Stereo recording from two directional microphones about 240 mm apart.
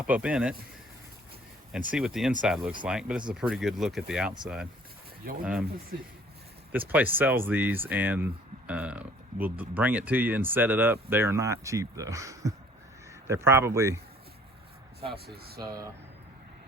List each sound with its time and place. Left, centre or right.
0.0 s speech: centre
1.9 s speech: centre
5.2 s speech: right
6.7 s speech: centre
15.1 s speech: right
15.6 s speech: centre